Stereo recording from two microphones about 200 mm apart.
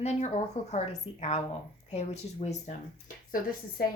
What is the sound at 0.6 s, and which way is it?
Speech, 35° left (ahead or behind).